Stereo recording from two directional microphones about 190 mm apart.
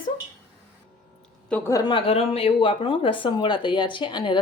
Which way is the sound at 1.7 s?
20° left (ahead or behind).